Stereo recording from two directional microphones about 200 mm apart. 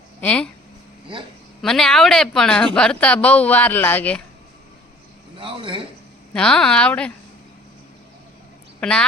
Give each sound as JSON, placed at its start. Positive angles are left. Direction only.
{"t": 0.2, "sound": "a woman's voice", "side_deg": 5}
{"t": 1.6, "sound": "a woman's voice", "side_deg": 0}
{"t": 5.4, "sound": "speech", "side_deg": -25}
{"t": 6.3, "sound": "a woman's voice", "side_deg": 5}
{"t": 8.8, "sound": "a woman's voice", "side_deg": 5}